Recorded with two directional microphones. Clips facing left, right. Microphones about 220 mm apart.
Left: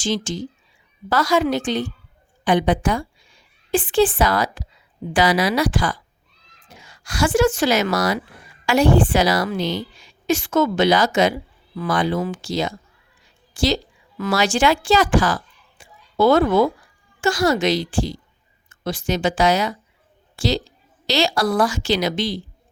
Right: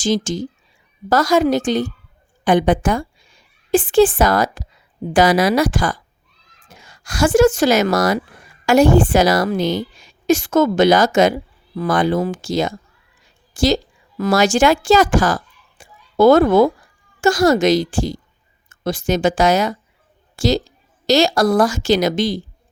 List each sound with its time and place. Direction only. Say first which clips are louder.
0.0 s a woman's voice: right 5 dB; 45° right (ahead or behind)
15.8 s a sound: right 5 dB; 45° right (ahead or behind)
17.2 s a woman's voice: right 5 dB; 45° right (ahead or behind)